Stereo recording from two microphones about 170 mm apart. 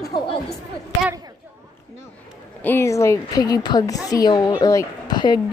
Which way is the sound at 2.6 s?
10° left (ahead or behind).